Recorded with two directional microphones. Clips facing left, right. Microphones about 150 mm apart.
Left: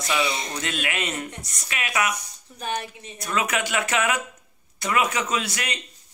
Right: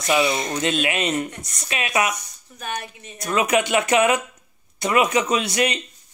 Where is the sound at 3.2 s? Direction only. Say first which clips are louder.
Right 6 dB; 20° right (ahead or behind).